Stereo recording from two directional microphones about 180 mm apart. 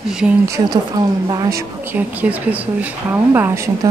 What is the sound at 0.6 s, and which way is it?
Speech, 25° right (ahead or behind).